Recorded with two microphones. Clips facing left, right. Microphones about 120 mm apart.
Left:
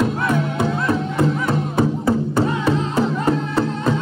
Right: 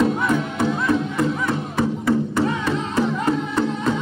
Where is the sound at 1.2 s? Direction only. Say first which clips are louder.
Left 2 dB; 30° left (ahead or behind).